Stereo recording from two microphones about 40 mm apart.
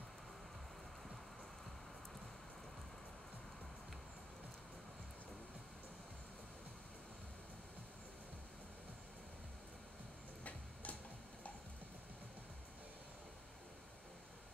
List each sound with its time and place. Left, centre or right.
10.4 s tick-tock: left